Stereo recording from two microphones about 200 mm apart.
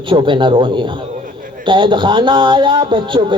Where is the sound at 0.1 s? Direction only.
25° right (ahead or behind).